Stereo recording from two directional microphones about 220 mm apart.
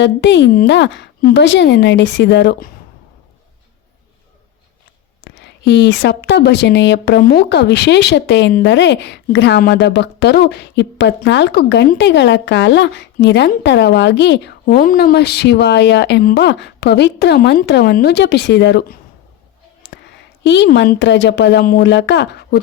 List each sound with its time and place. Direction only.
0.0 s a woman's voice: 55° left (ahead or behind)
5.2 s a woman's voice: 50° left (ahead or behind)
20.1 s a woman's voice: 50° left (ahead or behind)